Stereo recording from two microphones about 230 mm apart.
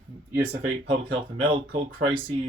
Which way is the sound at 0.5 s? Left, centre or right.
Right.